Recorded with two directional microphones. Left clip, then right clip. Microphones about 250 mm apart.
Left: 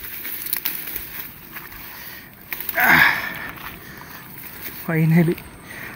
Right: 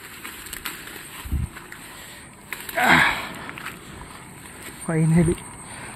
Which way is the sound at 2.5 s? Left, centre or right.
Centre.